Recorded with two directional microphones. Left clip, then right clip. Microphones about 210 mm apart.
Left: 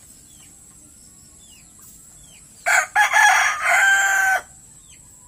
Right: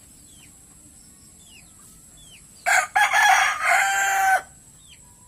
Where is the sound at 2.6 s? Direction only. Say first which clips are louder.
Left 2 dB; 30° right (ahead or behind).